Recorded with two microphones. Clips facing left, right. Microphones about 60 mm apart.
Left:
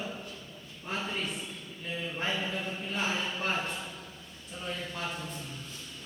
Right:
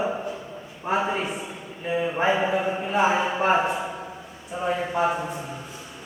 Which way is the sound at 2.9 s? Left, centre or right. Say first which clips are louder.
Right 12 dB; right.